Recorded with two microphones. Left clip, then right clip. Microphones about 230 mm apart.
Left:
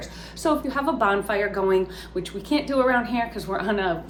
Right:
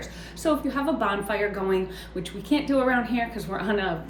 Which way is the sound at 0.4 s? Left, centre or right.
Centre.